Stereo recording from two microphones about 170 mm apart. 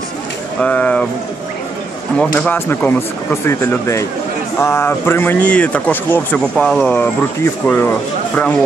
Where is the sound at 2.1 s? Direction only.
5° left (ahead or behind).